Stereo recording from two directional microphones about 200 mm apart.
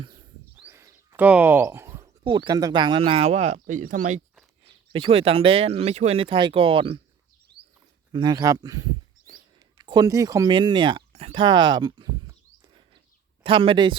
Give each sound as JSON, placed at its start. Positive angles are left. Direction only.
{"t": 0.5, "sound": "speech", "side_deg": -10}
{"t": 4.6, "sound": "speech", "side_deg": -30}
{"t": 8.1, "sound": "speech", "side_deg": -20}
{"t": 11.1, "sound": "a sound", "side_deg": -30}
{"t": 13.4, "sound": "speech", "side_deg": -25}